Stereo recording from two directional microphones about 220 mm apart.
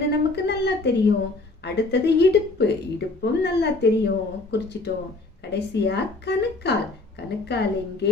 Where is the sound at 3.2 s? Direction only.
50° left (ahead or behind).